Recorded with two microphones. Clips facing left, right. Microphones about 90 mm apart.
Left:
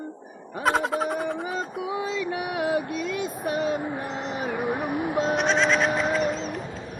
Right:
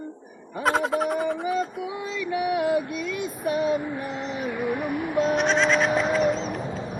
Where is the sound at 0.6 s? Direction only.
Centre (ahead or behind).